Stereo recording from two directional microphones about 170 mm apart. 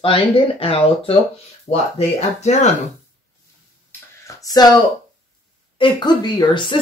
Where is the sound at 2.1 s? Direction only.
40° left (ahead or behind).